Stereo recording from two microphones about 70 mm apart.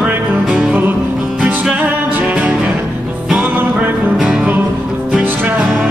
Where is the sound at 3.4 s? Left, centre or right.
Right.